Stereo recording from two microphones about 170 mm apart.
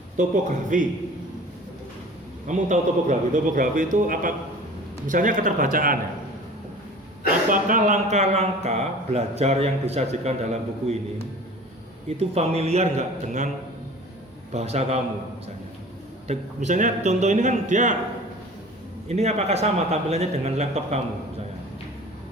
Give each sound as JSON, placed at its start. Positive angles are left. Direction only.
{"t": 0.2, "sound": "a man's voice", "side_deg": -45}
{"t": 2.5, "sound": "a man's voice", "side_deg": -45}
{"t": 7.5, "sound": "a man's voice", "side_deg": -50}
{"t": 12.0, "sound": "a man's voice", "side_deg": -40}
{"t": 14.5, "sound": "a man's voice", "side_deg": -40}
{"t": 16.2, "sound": "a man's voice", "side_deg": -40}
{"t": 19.0, "sound": "a man's voice", "side_deg": -40}